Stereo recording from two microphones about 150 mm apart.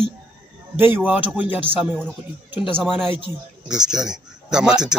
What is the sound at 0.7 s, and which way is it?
A man's voice, 10° right (ahead or behind).